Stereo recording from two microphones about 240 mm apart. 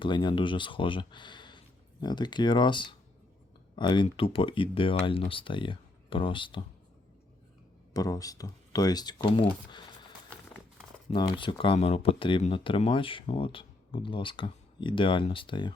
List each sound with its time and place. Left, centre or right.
0.0 s speech: centre
7.9 s speech: centre
10.2 s a sound: centre
11.1 s speech: centre